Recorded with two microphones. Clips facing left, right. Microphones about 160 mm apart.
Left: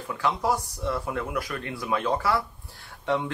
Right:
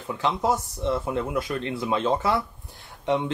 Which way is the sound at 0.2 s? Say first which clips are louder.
Right 1 dB; 20° right (ahead or behind).